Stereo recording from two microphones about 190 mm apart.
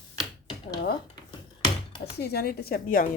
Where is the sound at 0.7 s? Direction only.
55° left (ahead or behind).